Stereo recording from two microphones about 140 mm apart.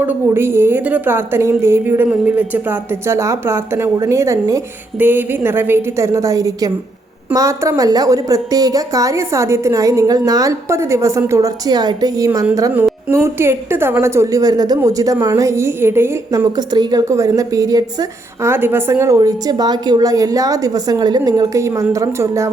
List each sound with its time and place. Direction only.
0.0 s a woman's voice: 15° right (ahead or behind)
16.6 s a woman's voice: 30° right (ahead or behind)